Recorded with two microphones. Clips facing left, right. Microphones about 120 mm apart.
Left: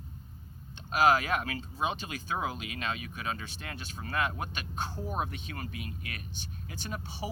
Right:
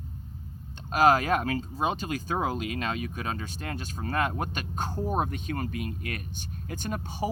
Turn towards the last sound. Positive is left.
turn(degrees=-45)  # may be behind; listen again after turning